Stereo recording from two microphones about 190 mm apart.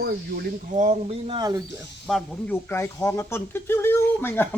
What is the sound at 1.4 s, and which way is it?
Speech, 20° right (ahead or behind).